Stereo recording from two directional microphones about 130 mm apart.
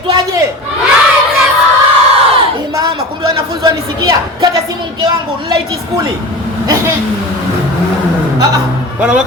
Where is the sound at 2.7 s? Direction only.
30° right (ahead or behind).